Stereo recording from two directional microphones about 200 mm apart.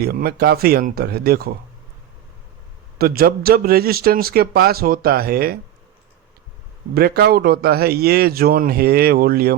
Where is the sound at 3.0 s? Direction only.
50° right (ahead or behind).